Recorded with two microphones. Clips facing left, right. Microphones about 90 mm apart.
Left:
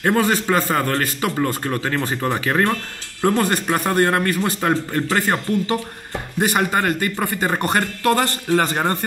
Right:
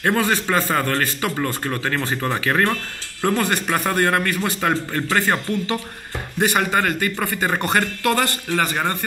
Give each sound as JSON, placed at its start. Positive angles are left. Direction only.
{"t": 0.0, "sound": "a man's voice", "side_deg": 25}
{"t": 8.0, "sound": "speech", "side_deg": 30}